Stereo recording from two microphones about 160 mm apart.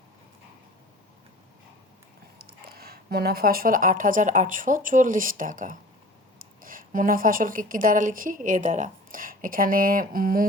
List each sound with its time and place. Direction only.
2.6 s speech: 75° right (ahead or behind)